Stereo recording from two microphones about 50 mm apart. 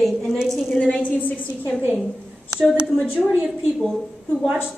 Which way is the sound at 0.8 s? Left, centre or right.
Left.